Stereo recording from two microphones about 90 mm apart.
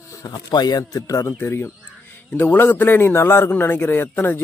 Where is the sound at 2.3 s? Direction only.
20° left (ahead or behind).